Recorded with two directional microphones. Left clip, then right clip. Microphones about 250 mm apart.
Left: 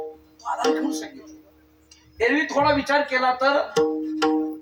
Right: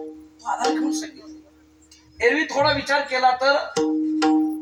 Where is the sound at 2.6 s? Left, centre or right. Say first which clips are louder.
Left 1 dB; left.